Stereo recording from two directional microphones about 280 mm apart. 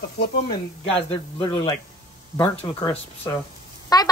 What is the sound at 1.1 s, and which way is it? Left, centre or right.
Speech, centre.